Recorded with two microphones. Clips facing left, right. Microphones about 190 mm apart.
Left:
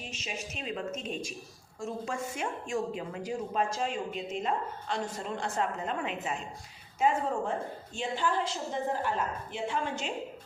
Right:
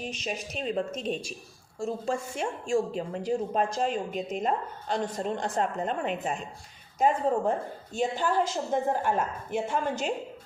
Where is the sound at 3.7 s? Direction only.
45° right (ahead or behind).